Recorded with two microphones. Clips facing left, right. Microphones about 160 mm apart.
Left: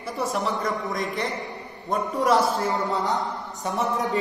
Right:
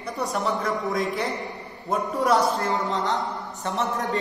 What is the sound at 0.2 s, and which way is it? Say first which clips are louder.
A man's voice: even; centre (ahead or behind).